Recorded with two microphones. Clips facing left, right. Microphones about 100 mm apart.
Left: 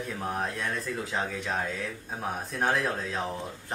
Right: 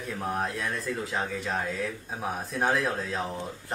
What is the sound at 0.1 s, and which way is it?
Speech, centre (ahead or behind).